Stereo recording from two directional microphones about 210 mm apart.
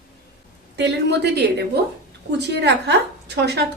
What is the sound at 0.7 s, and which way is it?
A woman's voice, 55° right (ahead or behind).